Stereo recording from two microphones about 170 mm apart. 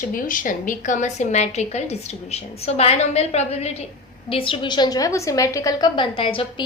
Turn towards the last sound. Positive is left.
turn(degrees=30)  # may be behind; listen again after turning